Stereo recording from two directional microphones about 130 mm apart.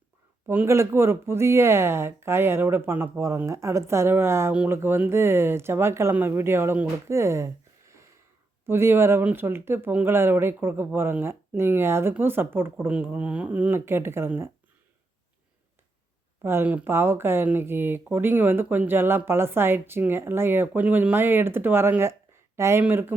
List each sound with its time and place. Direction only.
0.4 s speech: 20° right (ahead or behind)
16.4 s speech: 20° right (ahead or behind)